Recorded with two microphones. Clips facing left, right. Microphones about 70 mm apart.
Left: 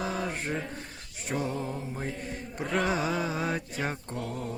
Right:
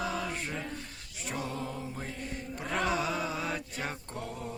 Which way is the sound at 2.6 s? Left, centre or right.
Left.